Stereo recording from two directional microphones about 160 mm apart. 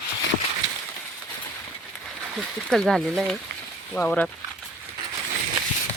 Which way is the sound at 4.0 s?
10° left (ahead or behind).